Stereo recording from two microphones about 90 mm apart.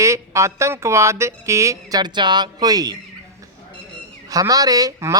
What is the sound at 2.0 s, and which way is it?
Speech, 55° right (ahead or behind).